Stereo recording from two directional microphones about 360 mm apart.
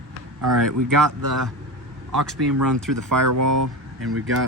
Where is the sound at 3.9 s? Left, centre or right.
Right.